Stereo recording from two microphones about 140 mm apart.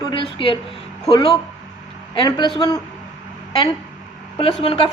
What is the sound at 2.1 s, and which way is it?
Speech, 35° left (ahead or behind).